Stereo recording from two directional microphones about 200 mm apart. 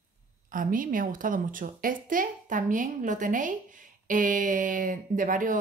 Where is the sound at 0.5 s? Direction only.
45° right (ahead or behind).